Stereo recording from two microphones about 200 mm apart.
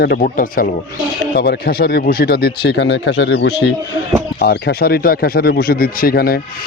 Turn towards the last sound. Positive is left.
turn(degrees=50)  # may be behind; listen again after turning